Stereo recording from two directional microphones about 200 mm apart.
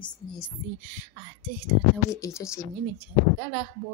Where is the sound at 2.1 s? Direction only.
15° left (ahead or behind).